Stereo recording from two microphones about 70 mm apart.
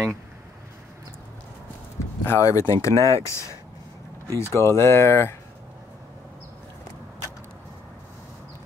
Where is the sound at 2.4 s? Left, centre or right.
Left.